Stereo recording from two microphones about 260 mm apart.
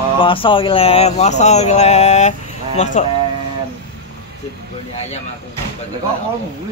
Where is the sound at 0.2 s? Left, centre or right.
Centre.